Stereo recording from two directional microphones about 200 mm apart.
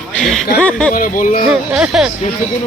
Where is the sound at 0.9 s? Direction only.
45° left (ahead or behind).